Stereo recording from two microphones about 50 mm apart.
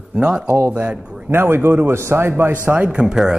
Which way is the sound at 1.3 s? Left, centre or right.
Right.